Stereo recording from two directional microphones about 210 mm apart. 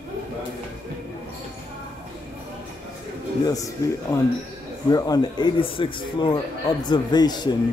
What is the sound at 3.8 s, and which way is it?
Speech, 15° left (ahead or behind).